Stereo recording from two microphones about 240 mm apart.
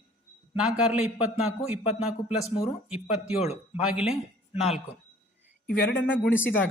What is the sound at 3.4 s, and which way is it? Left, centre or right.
Speech, left.